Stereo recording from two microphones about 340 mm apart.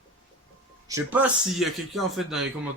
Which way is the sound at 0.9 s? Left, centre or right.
Centre.